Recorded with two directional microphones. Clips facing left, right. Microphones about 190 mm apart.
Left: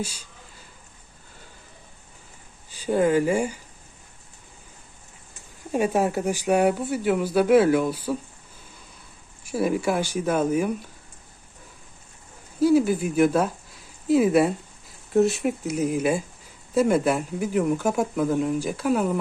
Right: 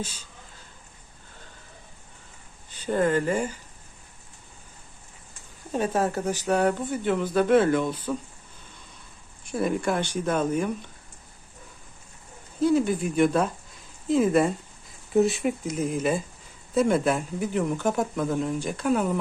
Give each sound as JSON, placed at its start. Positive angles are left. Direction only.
{"t": 0.0, "sound": "speech", "side_deg": 10}
{"t": 2.6, "sound": "speech", "side_deg": 10}
{"t": 5.7, "sound": "speech", "side_deg": 10}
{"t": 9.4, "sound": "speech", "side_deg": 5}
{"t": 12.5, "sound": "speech", "side_deg": 5}